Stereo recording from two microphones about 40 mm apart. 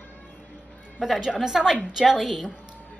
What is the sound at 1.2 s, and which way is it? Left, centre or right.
A woman's voice, centre.